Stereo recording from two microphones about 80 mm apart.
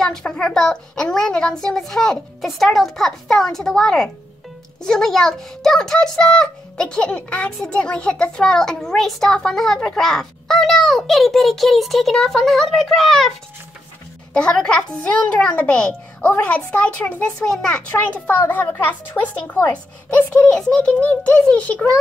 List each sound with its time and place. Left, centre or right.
0.0 s a child's voice: centre
14.3 s speech: centre
17.5 s speech: centre
17.8 s a child's voice: centre
21.0 s speech: centre